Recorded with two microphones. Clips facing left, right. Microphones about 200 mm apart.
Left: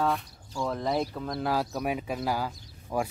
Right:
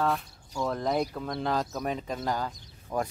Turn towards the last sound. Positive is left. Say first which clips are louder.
# left 1 dB
turn(degrees=10)  # may be behind; listen again after turning